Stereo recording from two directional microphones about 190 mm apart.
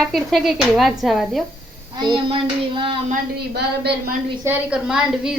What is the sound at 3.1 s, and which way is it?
Speech, 60° right (ahead or behind).